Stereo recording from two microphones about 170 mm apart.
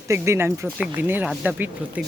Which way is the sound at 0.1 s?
15° right (ahead or behind).